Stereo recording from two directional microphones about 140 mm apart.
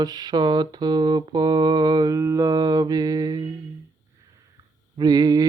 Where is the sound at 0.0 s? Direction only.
30° right (ahead or behind).